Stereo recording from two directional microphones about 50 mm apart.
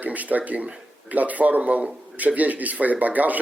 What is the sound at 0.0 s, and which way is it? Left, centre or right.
Speech, right.